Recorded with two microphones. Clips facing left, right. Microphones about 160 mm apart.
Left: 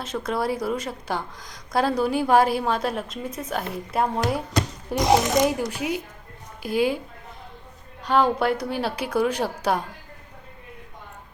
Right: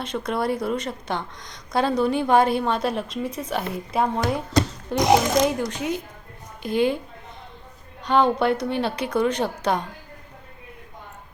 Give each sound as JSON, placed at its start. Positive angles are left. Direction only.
{"t": 0.0, "sound": "a woman's voice", "side_deg": 5}
{"t": 8.0, "sound": "a woman's voice", "side_deg": 5}